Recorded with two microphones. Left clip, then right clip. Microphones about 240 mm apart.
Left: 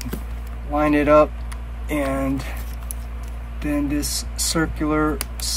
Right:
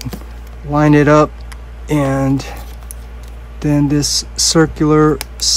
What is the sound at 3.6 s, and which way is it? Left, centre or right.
Speech, right.